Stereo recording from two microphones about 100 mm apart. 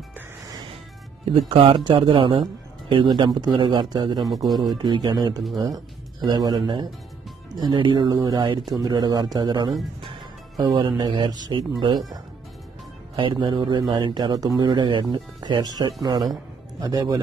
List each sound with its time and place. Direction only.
1.2 s speech: 65° right (ahead or behind)
3.3 s speech: 45° right (ahead or behind)
13.1 s speech: 55° right (ahead or behind)
16.8 s speech: 40° right (ahead or behind)